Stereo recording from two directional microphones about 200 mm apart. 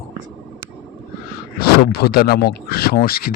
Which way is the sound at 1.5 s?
50° left (ahead or behind).